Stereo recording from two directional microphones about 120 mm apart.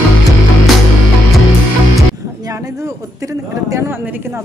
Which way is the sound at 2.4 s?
30° right (ahead or behind).